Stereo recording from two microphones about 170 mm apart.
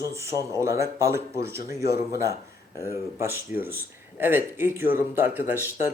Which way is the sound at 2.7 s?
15° right (ahead or behind).